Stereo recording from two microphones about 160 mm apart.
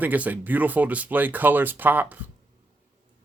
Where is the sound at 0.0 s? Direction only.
10° right (ahead or behind).